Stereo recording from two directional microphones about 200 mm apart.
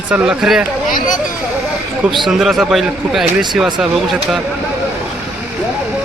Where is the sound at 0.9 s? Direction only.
40° left (ahead or behind).